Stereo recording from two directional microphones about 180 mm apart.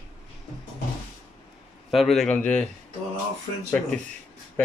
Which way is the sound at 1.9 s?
Centre (ahead or behind).